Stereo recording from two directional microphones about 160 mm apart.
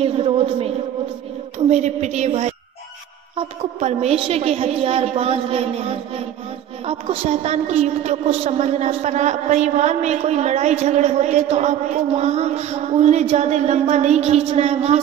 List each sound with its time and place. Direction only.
0.0 s a sound: 40° right (ahead or behind)
1.7 s a woman's voice: 45° right (ahead or behind)
3.8 s a woman's voice: 40° right (ahead or behind)